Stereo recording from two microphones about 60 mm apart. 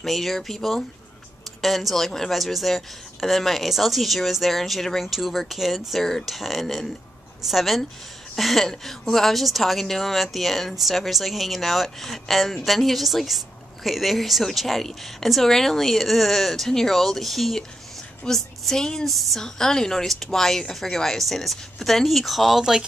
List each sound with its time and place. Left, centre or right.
0.0 s speech: centre